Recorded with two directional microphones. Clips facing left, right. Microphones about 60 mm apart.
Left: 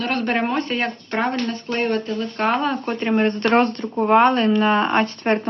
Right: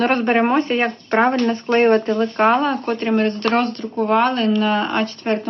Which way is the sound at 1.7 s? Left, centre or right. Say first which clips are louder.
Right 9 dB; right.